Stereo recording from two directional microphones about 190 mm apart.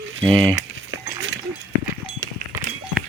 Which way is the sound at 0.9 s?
70° right (ahead or behind).